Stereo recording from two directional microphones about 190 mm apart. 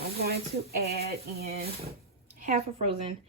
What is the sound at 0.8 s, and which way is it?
Speech, 55° right (ahead or behind).